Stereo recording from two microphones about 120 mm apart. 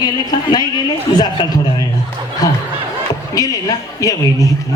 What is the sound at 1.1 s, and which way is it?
A man's voice, 35° left (ahead or behind).